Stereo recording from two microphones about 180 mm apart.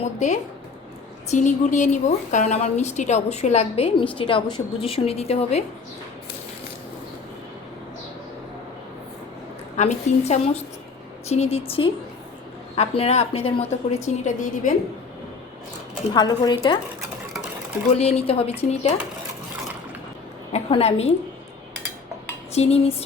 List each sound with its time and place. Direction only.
0.0 s a woman's voice: 40° left (ahead or behind)
9.7 s a woman's voice: 40° left (ahead or behind)
14.3 s a woman's voice: 45° left (ahead or behind)
16.1 s speech: 25° left (ahead or behind)
17.9 s a woman's voice: 35° left (ahead or behind)
20.5 s a woman's voice: 35° left (ahead or behind)
22.5 s a woman's voice: 35° left (ahead or behind)